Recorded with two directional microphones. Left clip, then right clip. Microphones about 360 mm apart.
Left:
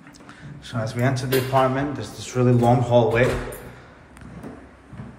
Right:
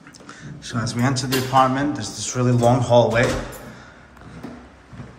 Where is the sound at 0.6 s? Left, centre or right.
Centre.